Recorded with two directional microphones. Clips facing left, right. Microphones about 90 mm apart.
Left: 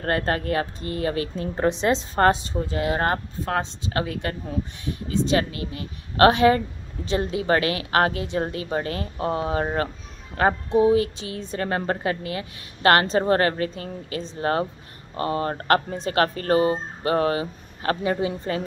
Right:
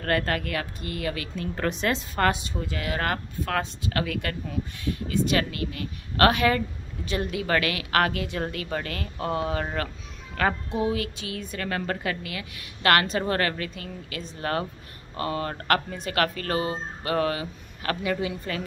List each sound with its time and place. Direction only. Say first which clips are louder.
0.0 s a woman's voice: left 2 dB; 30° left (ahead or behind)